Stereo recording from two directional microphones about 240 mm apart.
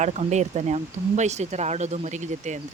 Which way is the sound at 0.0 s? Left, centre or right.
Right.